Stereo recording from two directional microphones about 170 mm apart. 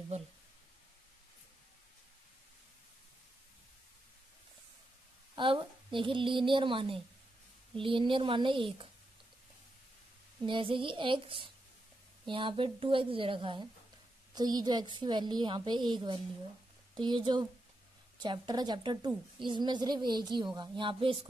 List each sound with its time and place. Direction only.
5.3 s a woman's voice: 30° right (ahead or behind)
10.4 s a woman's voice: 30° right (ahead or behind)